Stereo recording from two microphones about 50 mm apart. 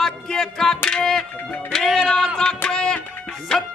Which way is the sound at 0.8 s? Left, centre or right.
Centre.